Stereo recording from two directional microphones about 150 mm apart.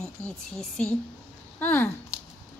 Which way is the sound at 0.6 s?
5° left (ahead or behind).